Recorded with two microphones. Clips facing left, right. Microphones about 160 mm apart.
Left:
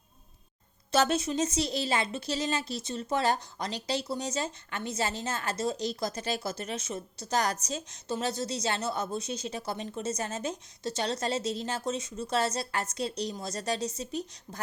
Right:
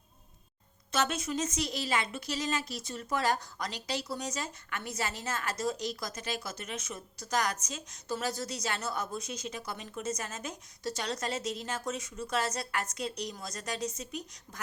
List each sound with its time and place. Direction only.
0.9 s a woman's voice: 35° left (ahead or behind)